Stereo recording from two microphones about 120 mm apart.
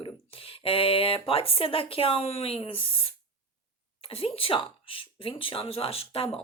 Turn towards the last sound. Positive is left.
turn(degrees=50)  # may be behind; listen again after turning